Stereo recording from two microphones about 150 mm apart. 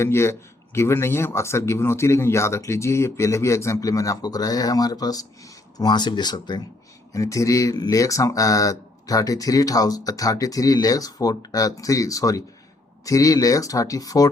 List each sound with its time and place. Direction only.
0.0 s speech: 15° left (ahead or behind)